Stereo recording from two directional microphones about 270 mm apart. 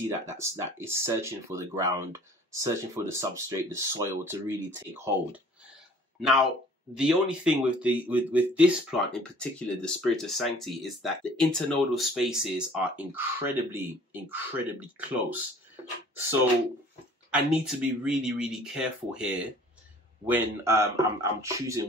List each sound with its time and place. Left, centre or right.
0.1 s speech: centre
7.0 s speech: centre
17.3 s speech: centre
20.2 s speech: centre